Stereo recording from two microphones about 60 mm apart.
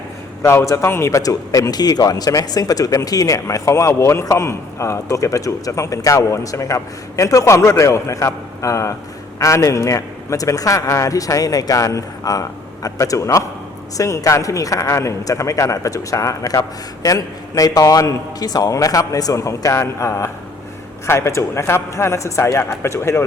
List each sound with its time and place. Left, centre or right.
0.4 s a man's voice: left
0.9 s speech: left
1.2 s speech: left
3.4 s a man's voice: left
10.8 s a man's voice: left
15.2 s a man's voice: left